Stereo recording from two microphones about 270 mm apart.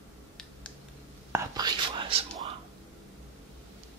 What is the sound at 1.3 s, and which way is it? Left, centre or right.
Whispering, centre.